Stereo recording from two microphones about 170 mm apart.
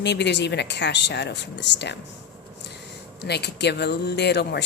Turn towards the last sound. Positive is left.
turn(degrees=85)